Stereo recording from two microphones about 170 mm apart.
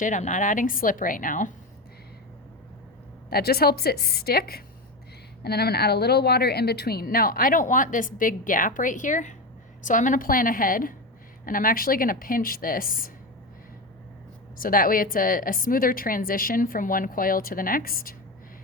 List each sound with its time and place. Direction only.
0.0 s a woman's voice: 45° left (ahead or behind)
3.2 s speech: 65° left (ahead or behind)
14.6 s speech: 55° left (ahead or behind)